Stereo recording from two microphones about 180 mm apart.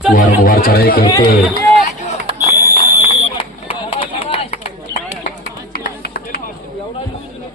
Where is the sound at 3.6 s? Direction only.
30° left (ahead or behind).